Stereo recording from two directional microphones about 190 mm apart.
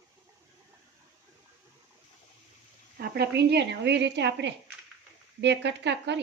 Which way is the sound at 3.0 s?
60° right (ahead or behind).